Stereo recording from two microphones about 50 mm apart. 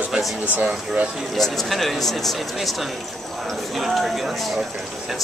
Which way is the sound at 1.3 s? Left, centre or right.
Centre.